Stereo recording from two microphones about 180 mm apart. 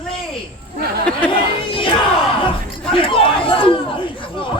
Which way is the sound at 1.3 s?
30° left (ahead or behind).